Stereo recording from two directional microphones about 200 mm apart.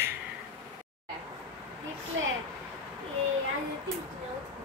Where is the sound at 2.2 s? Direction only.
70° right (ahead or behind).